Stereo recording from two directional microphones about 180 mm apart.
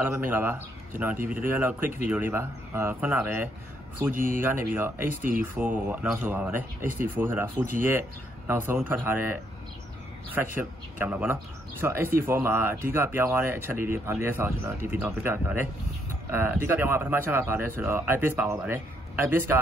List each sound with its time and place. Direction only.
0.0 s speech: 10° right (ahead or behind)
4.1 s speech: 50° right (ahead or behind)
4.4 s speech: 10° right (ahead or behind)
10.3 s speech: 10° right (ahead or behind)